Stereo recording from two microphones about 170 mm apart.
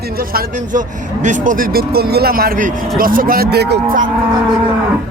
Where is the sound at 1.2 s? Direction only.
50° right (ahead or behind); by 3.8 s 70° right (ahead or behind).